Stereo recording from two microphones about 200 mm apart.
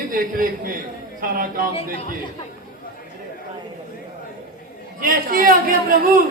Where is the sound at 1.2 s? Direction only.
45° right (ahead or behind).